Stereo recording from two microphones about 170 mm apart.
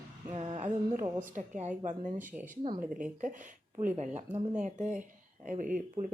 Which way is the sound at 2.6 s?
30° right (ahead or behind).